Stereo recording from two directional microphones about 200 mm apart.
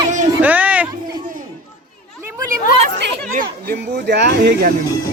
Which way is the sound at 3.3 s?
45° right (ahead or behind).